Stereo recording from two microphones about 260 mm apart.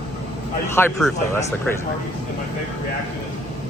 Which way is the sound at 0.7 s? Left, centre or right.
Centre.